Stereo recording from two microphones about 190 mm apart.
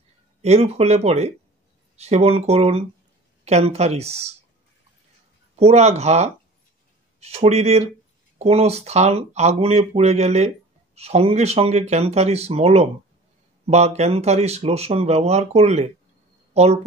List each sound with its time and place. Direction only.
0.4 s speech: 35° right (ahead or behind)
5.6 s speech: 35° right (ahead or behind)